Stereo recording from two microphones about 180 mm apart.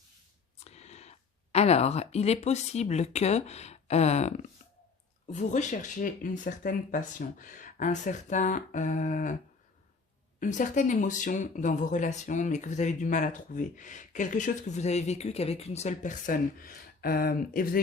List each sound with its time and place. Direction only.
0.6 s a sound: 35° left (ahead or behind)
1.5 s speech: 35° left (ahead or behind)
10.4 s speech: 45° left (ahead or behind)